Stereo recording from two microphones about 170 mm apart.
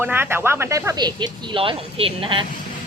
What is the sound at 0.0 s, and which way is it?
Speech, 15° right (ahead or behind).